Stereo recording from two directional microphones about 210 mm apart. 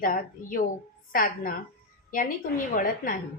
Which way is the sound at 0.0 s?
40° left (ahead or behind).